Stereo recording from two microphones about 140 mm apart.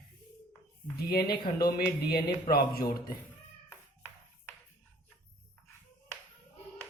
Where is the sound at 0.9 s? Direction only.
90° left.